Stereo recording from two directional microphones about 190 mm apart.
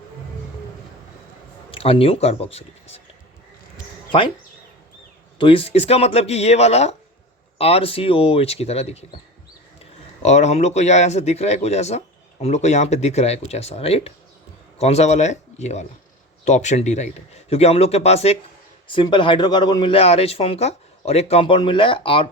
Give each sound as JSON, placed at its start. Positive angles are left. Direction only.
{"t": 1.7, "sound": "speech", "side_deg": 30}
{"t": 5.4, "sound": "speech", "side_deg": 30}
{"t": 10.2, "sound": "speech", "side_deg": 35}